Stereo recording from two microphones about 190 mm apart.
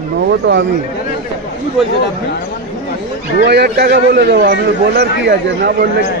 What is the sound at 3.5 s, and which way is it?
A man's voice, 60° right (ahead or behind).